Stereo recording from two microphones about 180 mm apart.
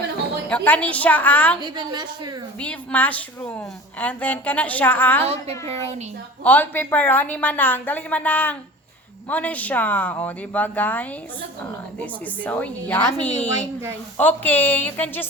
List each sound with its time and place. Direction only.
0.5 s a woman's voice: 10° left (ahead or behind)
1.6 s a woman's voice: 25° right (ahead or behind)
2.6 s a woman's voice: 10° left (ahead or behind)
5.2 s a child's voice: 35° right (ahead or behind)
6.4 s a woman's voice: 10° left (ahead or behind)